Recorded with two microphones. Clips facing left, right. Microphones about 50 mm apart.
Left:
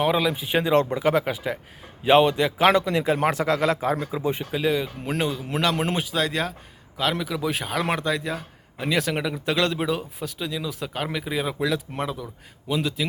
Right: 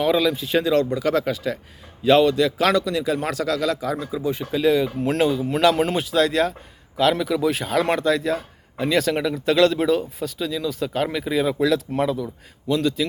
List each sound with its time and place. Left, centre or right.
0.0 s speech: centre
4.5 s speech: centre